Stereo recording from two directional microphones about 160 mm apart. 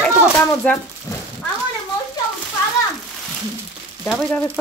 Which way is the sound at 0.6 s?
5° left (ahead or behind).